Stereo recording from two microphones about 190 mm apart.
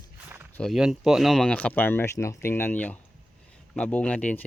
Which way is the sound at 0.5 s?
Centre (ahead or behind).